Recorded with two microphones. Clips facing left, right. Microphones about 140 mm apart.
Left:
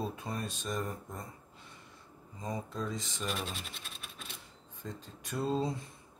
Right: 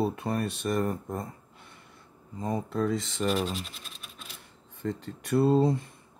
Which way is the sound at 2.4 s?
55° right (ahead or behind).